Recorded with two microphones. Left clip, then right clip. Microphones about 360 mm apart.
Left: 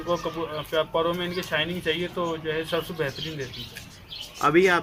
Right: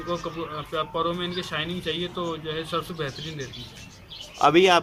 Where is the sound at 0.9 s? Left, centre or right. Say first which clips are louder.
Left 2 dB; centre.